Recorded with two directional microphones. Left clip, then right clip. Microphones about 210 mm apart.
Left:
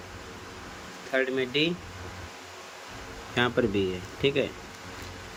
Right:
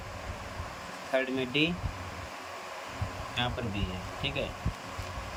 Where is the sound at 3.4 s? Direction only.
20° left (ahead or behind).